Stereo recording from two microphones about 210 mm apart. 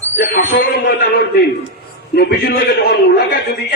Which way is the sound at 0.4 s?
40° left (ahead or behind).